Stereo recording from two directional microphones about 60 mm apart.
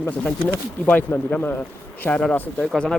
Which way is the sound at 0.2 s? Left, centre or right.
Centre.